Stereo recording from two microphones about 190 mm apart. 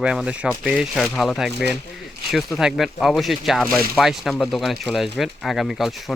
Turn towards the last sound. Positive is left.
turn(degrees=0)  # may be behind; listen again after turning